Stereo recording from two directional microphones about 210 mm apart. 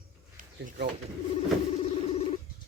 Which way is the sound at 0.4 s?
35° right (ahead or behind).